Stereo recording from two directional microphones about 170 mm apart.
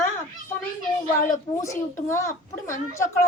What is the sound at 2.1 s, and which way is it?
Speech, 15° left (ahead or behind).